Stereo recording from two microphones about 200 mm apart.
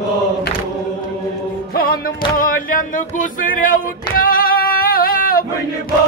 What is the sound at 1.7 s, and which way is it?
Music, 50° left (ahead or behind).